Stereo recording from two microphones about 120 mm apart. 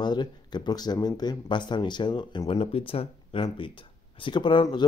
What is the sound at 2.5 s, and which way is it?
Speech, 50° left (ahead or behind).